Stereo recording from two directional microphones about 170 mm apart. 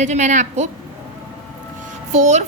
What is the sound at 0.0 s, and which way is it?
Speech, 45° right (ahead or behind).